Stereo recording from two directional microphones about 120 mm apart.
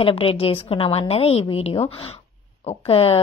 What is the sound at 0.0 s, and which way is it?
A woman's voice, 50° left (ahead or behind).